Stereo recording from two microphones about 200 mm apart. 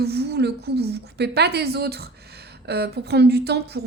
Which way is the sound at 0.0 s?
55° right (ahead or behind).